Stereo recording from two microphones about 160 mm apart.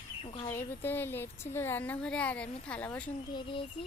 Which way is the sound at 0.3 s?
35° left (ahead or behind).